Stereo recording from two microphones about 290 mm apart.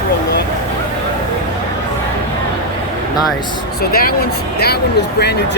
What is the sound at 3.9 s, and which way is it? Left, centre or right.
Speech, left.